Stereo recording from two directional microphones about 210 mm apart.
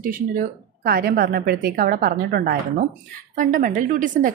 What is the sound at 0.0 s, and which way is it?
A woman's voice, 40° right (ahead or behind).